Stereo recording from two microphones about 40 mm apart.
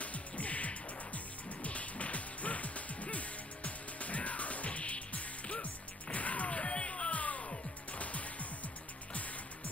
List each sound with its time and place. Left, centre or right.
0.0 s music: left